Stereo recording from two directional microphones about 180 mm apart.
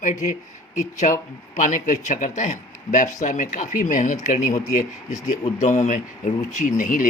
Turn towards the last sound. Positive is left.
turn(degrees=45)  # may be behind; listen again after turning